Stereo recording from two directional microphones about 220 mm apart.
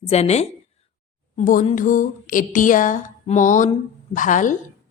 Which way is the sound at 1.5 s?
35° left (ahead or behind).